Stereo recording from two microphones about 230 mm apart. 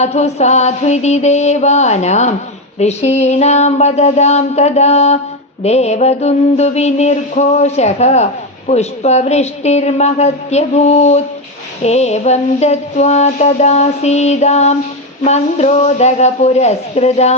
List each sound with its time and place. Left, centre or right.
0.0 s mantra: left